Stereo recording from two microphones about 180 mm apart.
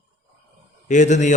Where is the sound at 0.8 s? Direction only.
40° left (ahead or behind).